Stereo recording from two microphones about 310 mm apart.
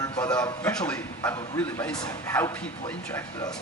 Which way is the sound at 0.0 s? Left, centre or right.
Centre.